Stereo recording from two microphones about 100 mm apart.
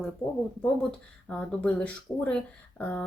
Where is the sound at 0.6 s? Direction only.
10° left (ahead or behind).